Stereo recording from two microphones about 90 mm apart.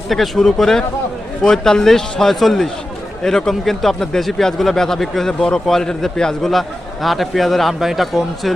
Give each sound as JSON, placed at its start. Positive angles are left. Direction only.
{"t": 0.1, "sound": "speech", "side_deg": 0}